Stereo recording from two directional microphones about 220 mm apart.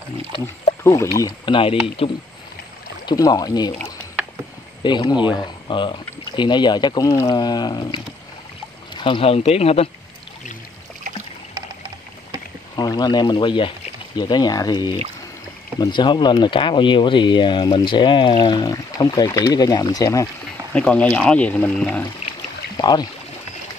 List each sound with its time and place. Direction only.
1.2 s speech: 20° left (ahead or behind)
4.8 s speech: 20° left (ahead or behind)
12.7 s speech: 20° left (ahead or behind)
20.7 s speech: 5° left (ahead or behind)
22.8 s speech: 15° left (ahead or behind)